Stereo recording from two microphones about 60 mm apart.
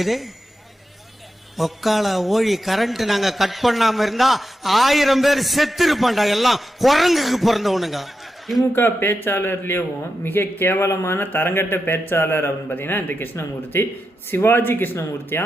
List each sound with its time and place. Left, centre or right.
0.0 s a man's voice: centre
1.5 s a man's voice: centre
8.7 s speech: left